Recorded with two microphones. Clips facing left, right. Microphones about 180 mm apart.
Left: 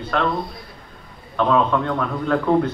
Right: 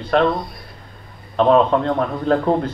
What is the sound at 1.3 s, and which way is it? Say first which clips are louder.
A man's voice: right 4 dB; 25° right (ahead or behind).